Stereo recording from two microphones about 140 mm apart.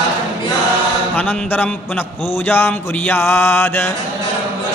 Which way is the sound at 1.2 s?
10° left (ahead or behind).